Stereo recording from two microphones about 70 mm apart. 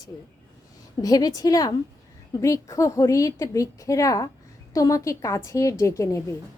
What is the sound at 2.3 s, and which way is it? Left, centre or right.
A woman's voice, left.